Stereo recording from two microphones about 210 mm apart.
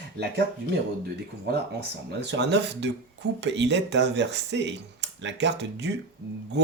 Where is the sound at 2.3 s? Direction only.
55° right (ahead or behind).